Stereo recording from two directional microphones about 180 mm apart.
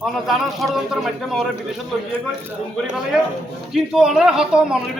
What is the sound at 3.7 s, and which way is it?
Speech, centre (ahead or behind).